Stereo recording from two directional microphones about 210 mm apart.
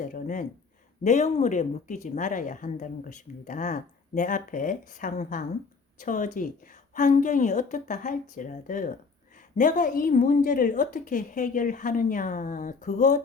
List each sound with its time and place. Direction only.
0.0 s a woman's voice: 40° left (ahead or behind)